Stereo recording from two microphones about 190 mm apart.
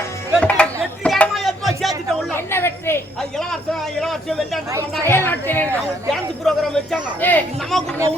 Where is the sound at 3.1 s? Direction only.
Centre (ahead or behind).